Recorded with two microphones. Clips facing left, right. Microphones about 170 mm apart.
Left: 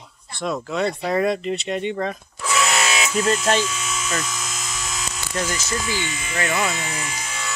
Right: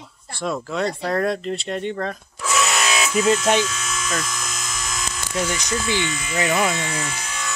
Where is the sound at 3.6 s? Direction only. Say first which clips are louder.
Even; 10° left (ahead or behind).